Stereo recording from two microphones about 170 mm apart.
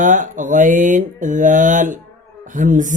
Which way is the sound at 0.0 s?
50° right (ahead or behind).